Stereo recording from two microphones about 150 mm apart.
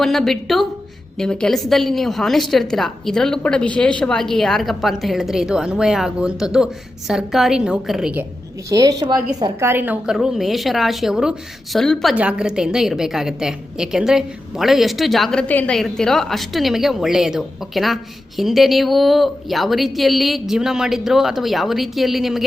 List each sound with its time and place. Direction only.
0.0 s a woman's voice: centre (ahead or behind)
8.7 s a woman's voice: 25° right (ahead or behind)
9.6 s a woman's voice: 15° right (ahead or behind)